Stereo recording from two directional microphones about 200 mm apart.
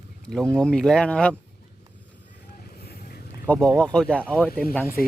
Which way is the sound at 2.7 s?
50° left (ahead or behind).